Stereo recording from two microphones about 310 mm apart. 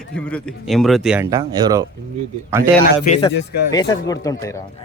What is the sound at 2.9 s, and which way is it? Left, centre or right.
Speech, left.